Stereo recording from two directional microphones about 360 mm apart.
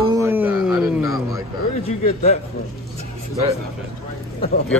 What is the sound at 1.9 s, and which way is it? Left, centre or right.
Speech, centre.